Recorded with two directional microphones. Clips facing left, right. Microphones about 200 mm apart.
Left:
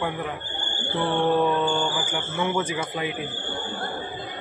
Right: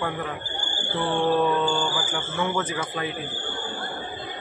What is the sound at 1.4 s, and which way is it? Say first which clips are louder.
Speech: even; 15° left (ahead or behind).